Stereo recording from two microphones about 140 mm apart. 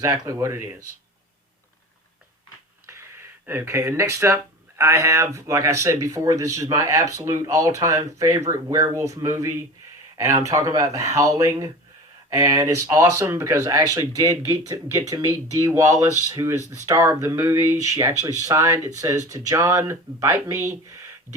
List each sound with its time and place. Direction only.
0.0 s speech: 20° right (ahead or behind)
2.8 s a sound: 20° right (ahead or behind)
4.8 s speech: 20° right (ahead or behind)